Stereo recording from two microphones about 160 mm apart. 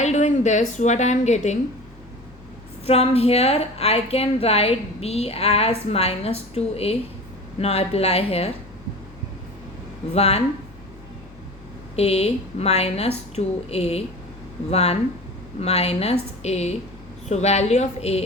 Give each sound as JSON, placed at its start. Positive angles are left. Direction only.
{"t": 0.0, "sound": "a sound", "side_deg": 45}
{"t": 0.8, "sound": "a woman's voice", "side_deg": 45}
{"t": 2.8, "sound": "a woman's voice", "side_deg": 40}
{"t": 10.2, "sound": "a woman's voice", "side_deg": 40}
{"t": 11.9, "sound": "a woman's voice", "side_deg": 40}